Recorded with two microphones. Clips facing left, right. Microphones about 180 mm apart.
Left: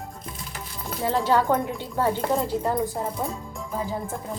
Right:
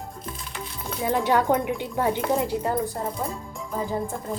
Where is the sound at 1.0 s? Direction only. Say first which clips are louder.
Even; 15° right (ahead or behind).